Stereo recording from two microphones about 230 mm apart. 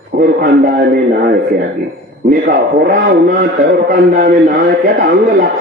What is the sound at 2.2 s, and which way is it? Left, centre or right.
A man's voice, right.